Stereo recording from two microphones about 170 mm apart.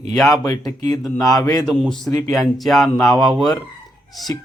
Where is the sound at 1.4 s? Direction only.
20° left (ahead or behind).